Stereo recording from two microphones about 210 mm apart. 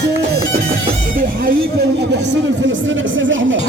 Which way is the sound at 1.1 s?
45° right (ahead or behind).